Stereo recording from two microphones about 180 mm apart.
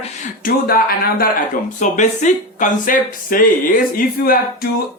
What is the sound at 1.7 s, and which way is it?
Speech, 40° left (ahead or behind).